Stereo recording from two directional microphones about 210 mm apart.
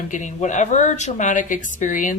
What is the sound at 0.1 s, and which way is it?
Speech, 35° left (ahead or behind).